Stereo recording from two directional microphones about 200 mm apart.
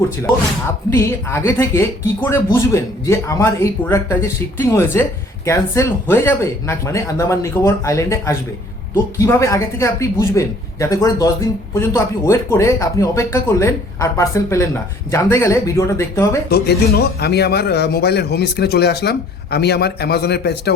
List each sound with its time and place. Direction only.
0.9 s speech: 15° left (ahead or behind)
16.5 s speech: 55° left (ahead or behind)